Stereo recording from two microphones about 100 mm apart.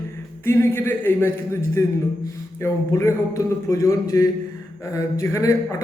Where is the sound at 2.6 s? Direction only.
30° left (ahead or behind).